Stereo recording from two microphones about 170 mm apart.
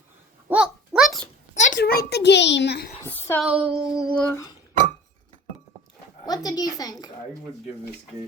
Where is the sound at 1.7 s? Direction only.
65° left (ahead or behind).